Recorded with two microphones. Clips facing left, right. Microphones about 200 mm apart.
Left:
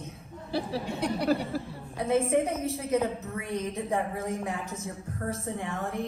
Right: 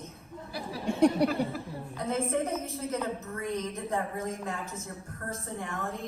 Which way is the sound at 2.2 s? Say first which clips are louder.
Left 4 dB; 15° left (ahead or behind).